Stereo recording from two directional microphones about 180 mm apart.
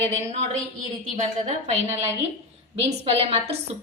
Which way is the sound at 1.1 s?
40° right (ahead or behind).